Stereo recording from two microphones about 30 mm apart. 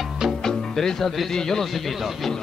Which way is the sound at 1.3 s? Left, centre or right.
Centre.